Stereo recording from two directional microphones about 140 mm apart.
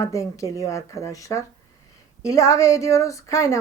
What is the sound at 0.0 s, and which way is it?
A woman's voice, 20° left (ahead or behind).